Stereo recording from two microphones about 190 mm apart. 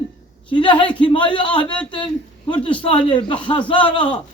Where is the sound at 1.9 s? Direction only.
25° left (ahead or behind).